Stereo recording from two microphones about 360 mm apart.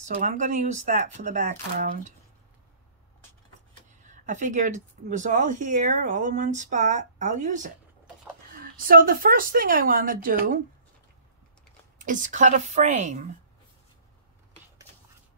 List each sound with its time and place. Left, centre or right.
0.0 s speech: centre
4.0 s speech: centre
8.7 s speech: right
12.0 s speech: right